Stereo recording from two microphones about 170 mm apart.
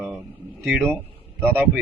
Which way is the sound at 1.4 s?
10° right (ahead or behind).